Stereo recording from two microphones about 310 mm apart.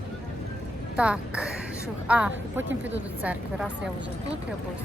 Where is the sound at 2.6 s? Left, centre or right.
Right.